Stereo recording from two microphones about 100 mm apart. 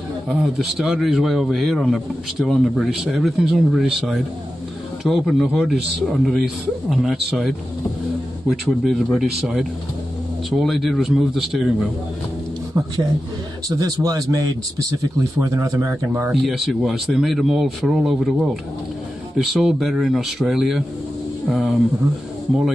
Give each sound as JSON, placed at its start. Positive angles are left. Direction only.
{"t": 0.3, "sound": "a man's voice", "side_deg": -5}
{"t": 13.7, "sound": "a man's voice", "side_deg": -40}
{"t": 16.3, "sound": "a man's voice", "side_deg": 0}